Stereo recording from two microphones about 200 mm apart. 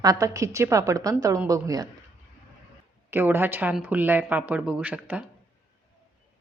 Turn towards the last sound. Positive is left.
turn(degrees=-5)  # may be behind; listen again after turning